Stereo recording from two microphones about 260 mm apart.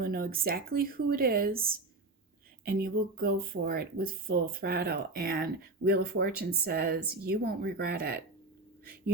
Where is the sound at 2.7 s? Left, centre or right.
Right.